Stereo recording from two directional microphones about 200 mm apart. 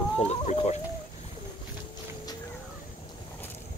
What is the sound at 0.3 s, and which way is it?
Speech, 35° left (ahead or behind).